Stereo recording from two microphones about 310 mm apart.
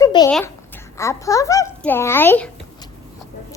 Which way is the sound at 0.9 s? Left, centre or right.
Centre.